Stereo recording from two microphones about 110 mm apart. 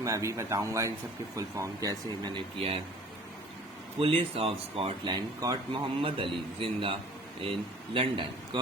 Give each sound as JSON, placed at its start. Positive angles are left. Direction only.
{"t": 0.0, "sound": "speech", "side_deg": -30}
{"t": 2.3, "sound": "speech", "side_deg": -55}
{"t": 4.0, "sound": "speech", "side_deg": -60}
{"t": 5.0, "sound": "speech", "side_deg": -40}
{"t": 5.7, "sound": "a man's voice", "side_deg": -55}